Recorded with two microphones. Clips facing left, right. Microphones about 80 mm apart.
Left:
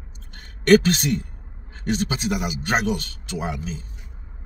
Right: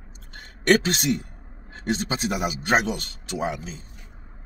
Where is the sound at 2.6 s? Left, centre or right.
Right.